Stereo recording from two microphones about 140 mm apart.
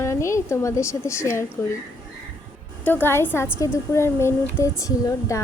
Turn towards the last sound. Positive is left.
turn(degrees=20)  # may be behind; listen again after turning